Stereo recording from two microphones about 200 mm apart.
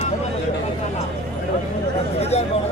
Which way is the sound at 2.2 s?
30° left (ahead or behind).